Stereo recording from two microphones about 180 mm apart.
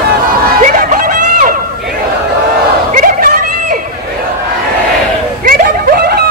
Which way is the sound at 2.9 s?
50° right (ahead or behind).